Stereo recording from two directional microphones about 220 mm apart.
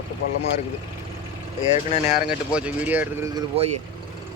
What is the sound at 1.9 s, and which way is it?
Speech, 30° left (ahead or behind).